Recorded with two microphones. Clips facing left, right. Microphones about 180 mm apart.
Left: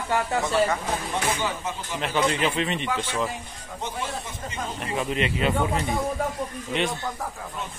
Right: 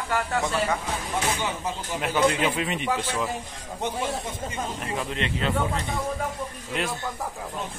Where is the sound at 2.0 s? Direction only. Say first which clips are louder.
Right 1 dB; 5° right (ahead or behind).